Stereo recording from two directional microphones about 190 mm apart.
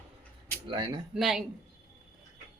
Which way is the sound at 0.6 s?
25° right (ahead or behind).